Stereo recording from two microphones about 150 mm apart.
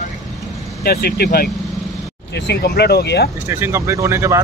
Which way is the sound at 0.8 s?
90° left.